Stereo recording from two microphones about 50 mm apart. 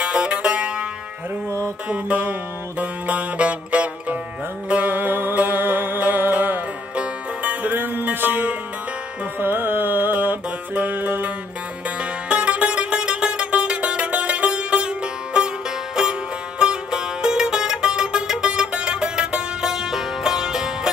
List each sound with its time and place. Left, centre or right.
0.0 s music: right
1.9 s music: right
12.0 s music: right
16.0 s music: centre